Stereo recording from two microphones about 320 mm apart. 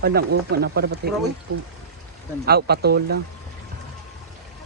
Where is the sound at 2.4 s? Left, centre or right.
Right.